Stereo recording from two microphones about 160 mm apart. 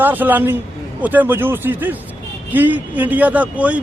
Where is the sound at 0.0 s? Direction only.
10° right (ahead or behind).